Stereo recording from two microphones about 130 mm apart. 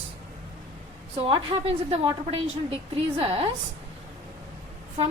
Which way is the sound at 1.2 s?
50° right (ahead or behind).